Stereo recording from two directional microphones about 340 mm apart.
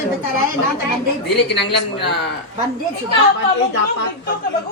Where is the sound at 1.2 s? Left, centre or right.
Left.